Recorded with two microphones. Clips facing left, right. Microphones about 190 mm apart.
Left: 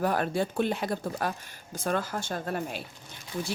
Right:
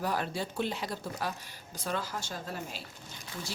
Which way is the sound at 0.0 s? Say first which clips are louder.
Left 6 dB; 55° left (ahead or behind).